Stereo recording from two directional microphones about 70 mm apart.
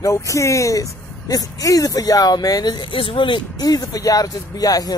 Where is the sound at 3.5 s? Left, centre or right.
Left.